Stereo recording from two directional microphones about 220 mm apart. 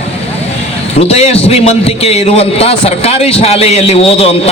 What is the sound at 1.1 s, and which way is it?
A man's voice, 30° left (ahead or behind).